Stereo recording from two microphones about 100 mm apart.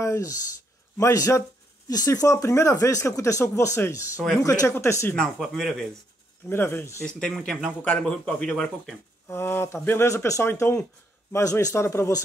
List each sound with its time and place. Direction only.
0.0 s speech: 30° left (ahead or behind)
5.1 s speech: 5° left (ahead or behind)
6.5 s speech: 25° left (ahead or behind)
7.1 s speech: 10° left (ahead or behind)
7.3 s speech: centre (ahead or behind)
7.8 s speech: 10° left (ahead or behind)
9.3 s speech: 25° left (ahead or behind)